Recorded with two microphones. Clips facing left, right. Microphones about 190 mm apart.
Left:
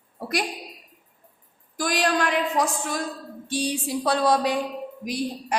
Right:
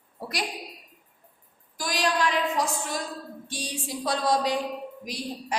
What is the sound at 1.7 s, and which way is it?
Speech, 55° left (ahead or behind).